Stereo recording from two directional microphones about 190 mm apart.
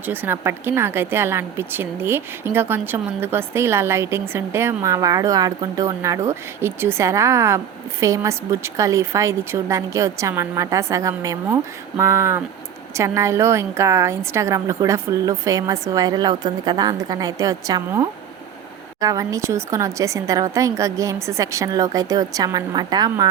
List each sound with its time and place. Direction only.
0.0 s a woman's voice: 10° right (ahead or behind)